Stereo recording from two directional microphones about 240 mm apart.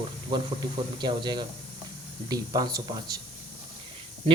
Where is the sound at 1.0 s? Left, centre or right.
Centre.